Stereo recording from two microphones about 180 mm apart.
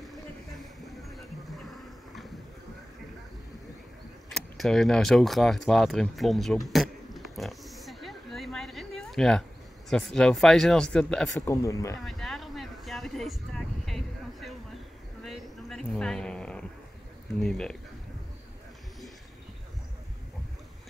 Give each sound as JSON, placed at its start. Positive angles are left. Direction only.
{"t": 0.1, "sound": "music", "side_deg": 0}
{"t": 4.3, "sound": "speech", "side_deg": 0}
{"t": 6.7, "sound": "oink", "side_deg": 0}
{"t": 9.8, "sound": "speech", "side_deg": 5}
{"t": 11.4, "sound": "speech", "side_deg": 15}
{"t": 12.0, "sound": "a sound", "side_deg": 0}
{"t": 17.4, "sound": "speech", "side_deg": 5}